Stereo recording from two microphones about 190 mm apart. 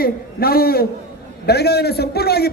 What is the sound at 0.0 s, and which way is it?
A man's voice, 55° left (ahead or behind).